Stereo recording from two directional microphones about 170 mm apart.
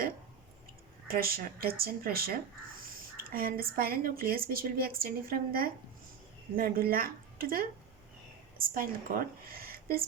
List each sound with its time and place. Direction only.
1.0 s a woman's voice: 60° right (ahead or behind)